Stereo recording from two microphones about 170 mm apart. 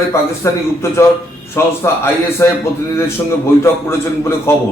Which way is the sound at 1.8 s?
15° left (ahead or behind).